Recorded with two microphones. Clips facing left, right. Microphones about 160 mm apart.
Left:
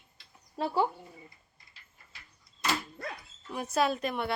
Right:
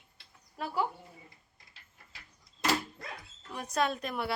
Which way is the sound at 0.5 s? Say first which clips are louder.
Left 4 dB; 30° left (ahead or behind).